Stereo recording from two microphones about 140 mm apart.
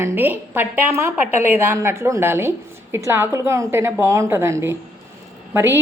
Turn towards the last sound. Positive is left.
turn(degrees=-15)  # may be behind; listen again after turning